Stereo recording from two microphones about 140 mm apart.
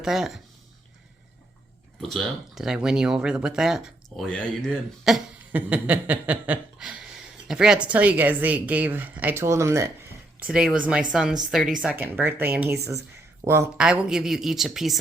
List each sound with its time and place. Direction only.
0.0 s speech: 5° right (ahead or behind)
2.0 s speech: centre (ahead or behind)
5.5 s a sound: 10° right (ahead or behind)
10.4 s speech: 5° right (ahead or behind)
11.8 s a sound: 5° right (ahead or behind)
13.4 s speech: 20° right (ahead or behind)
13.7 s speech: 5° right (ahead or behind)